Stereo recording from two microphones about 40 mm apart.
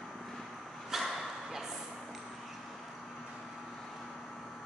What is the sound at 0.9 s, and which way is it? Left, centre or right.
Bow-wow, centre.